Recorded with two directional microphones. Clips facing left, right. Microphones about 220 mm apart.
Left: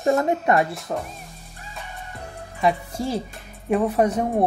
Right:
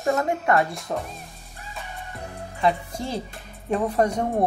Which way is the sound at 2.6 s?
10° left (ahead or behind).